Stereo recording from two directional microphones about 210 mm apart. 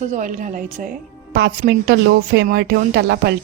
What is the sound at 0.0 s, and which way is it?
Speech, 35° right (ahead or behind).